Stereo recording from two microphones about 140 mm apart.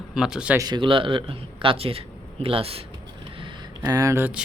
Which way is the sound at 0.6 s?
30° right (ahead or behind).